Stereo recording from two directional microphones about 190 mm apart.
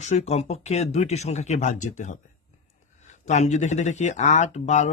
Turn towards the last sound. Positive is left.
turn(degrees=35)  # may be behind; listen again after turning